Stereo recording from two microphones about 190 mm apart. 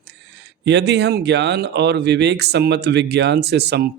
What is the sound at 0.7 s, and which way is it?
Speech, 65° right (ahead or behind).